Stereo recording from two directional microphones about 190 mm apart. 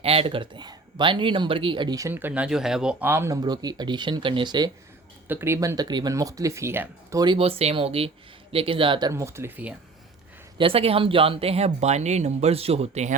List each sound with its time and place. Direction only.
0.0 s speech: 30° right (ahead or behind); by 9.7 s 10° right (ahead or behind)
10.6 s speech: 30° right (ahead or behind)